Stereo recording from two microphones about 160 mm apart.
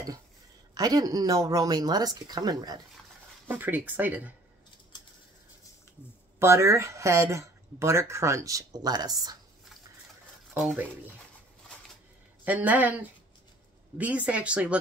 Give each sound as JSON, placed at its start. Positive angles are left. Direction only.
{"t": 0.7, "sound": "speech", "side_deg": -25}
{"t": 3.4, "sound": "speech", "side_deg": -10}
{"t": 6.4, "sound": "speech", "side_deg": -15}
{"t": 10.5, "sound": "speech", "side_deg": -10}
{"t": 12.4, "sound": "speech", "side_deg": -10}